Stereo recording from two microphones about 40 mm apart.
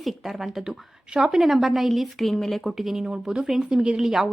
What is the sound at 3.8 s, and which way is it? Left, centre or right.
Speech, right.